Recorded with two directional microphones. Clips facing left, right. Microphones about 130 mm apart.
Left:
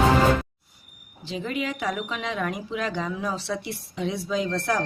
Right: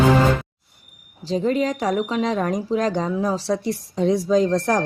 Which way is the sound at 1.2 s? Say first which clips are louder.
Right 9 dB; 40° right (ahead or behind).